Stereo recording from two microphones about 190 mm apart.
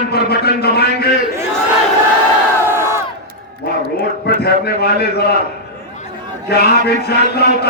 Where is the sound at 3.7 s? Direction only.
55° left (ahead or behind).